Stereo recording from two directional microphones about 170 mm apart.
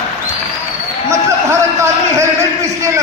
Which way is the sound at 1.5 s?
15° right (ahead or behind).